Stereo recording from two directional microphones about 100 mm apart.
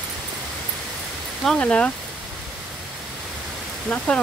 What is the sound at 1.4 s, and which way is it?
Speech, 10° left (ahead or behind).